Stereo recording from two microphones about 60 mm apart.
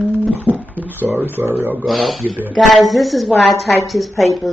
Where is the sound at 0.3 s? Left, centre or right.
Right.